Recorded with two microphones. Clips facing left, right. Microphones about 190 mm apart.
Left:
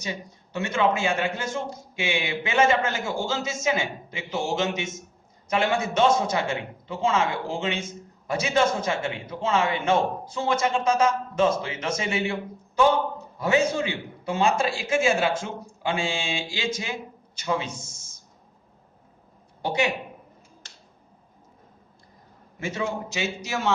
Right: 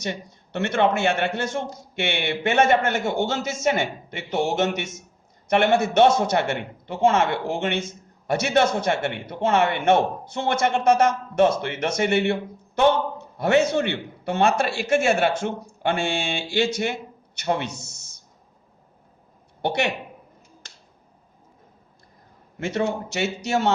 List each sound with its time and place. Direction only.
0.5 s a man's voice: 65° right (ahead or behind)
19.6 s a man's voice: 65° right (ahead or behind)
23.0 s a man's voice: 65° right (ahead or behind)